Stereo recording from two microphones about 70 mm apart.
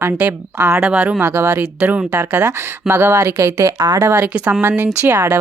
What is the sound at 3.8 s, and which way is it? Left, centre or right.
Speech, right.